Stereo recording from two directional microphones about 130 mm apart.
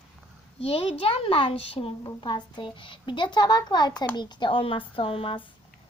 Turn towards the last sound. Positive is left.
turn(degrees=45)  # may be behind; listen again after turning